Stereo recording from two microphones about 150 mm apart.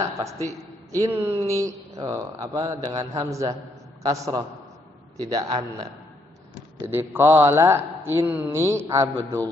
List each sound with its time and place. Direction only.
0.9 s speech: 15° right (ahead or behind)
6.8 s speech: 15° right (ahead or behind)